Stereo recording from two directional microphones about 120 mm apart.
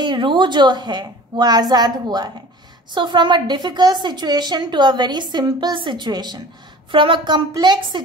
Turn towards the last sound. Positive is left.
turn(degrees=-35)  # may be behind; listen again after turning